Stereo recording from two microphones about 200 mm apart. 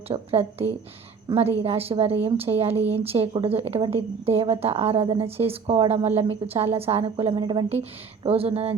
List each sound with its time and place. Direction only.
0.1 s speech: 30° right (ahead or behind)